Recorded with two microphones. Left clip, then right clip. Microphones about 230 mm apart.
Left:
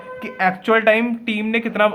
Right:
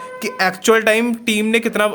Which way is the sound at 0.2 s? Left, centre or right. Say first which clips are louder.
Right 1 dB; right.